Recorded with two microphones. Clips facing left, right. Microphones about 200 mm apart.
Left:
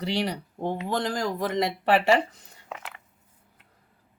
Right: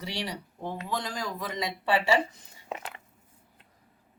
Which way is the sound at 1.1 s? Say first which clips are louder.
Left 7 dB; 80° left.